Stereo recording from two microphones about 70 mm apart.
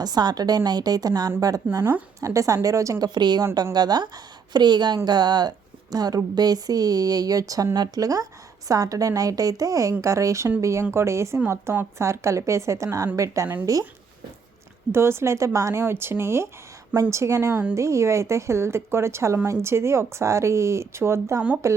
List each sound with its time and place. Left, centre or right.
0.0 s a woman's voice: right
3.0 s speech: right
3.5 s a woman's voice: right
14.9 s speech: right
15.8 s speech: right
17.5 s speech: right
17.7 s speech: right